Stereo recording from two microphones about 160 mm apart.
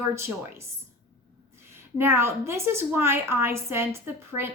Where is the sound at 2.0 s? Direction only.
15° right (ahead or behind).